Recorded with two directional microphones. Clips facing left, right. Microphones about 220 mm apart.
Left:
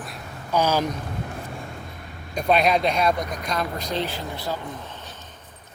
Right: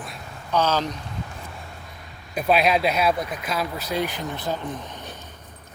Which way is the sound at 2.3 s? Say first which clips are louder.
Even; 5° right (ahead or behind).